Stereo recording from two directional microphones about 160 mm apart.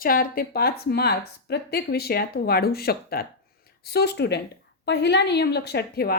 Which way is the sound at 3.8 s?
90° left.